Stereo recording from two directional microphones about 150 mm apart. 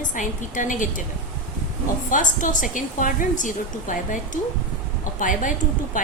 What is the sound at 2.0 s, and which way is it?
A woman's voice, 60° left (ahead or behind).